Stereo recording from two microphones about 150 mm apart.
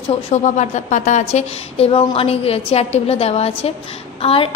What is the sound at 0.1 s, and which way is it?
A woman's voice, 50° left (ahead or behind).